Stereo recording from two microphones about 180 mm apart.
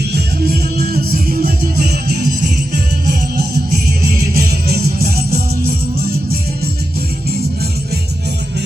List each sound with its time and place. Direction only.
0.1 s music: 55° right (ahead or behind)
3.7 s music: 50° right (ahead or behind)